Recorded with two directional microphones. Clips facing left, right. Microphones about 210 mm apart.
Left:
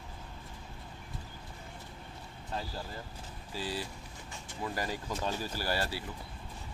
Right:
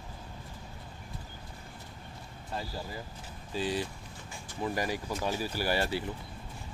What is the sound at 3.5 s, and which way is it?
A man's voice, 20° right (ahead or behind).